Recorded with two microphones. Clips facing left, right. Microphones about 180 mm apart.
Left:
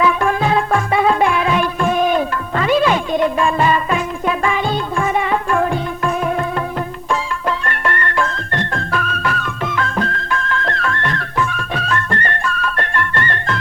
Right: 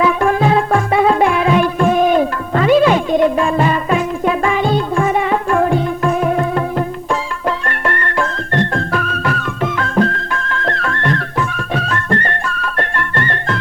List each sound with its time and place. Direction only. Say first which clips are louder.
0.0 s music: right 3 dB; 35° right (ahead or behind)
7.7 s music: right 1 dB; 40° right (ahead or behind)